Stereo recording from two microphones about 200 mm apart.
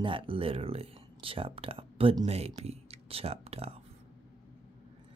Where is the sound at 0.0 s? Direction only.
25° right (ahead or behind).